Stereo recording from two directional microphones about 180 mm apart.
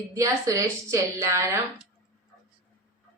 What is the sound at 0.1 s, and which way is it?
A woman's voice, 15° right (ahead or behind).